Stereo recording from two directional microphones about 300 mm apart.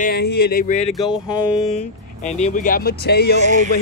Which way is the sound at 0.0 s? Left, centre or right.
Left.